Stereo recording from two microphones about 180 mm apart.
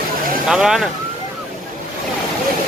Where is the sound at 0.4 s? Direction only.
5° right (ahead or behind).